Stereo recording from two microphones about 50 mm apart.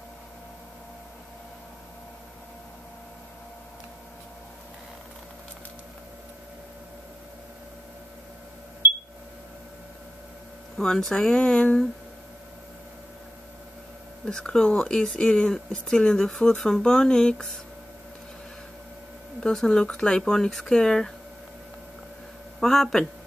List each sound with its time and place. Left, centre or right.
10.8 s speech: centre
14.2 s speech: centre
19.6 s speech: centre
22.6 s speech: centre